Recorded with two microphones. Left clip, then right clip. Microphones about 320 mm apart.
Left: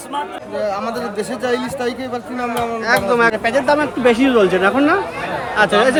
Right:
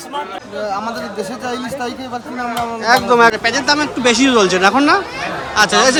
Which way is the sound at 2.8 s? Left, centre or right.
Centre.